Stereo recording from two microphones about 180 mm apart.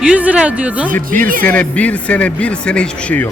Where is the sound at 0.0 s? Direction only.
5° right (ahead or behind).